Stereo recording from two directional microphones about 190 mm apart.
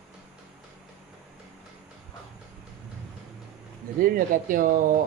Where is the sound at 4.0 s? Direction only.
50° right (ahead or behind).